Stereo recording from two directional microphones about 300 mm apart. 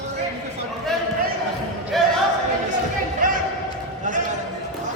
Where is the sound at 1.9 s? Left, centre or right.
Centre.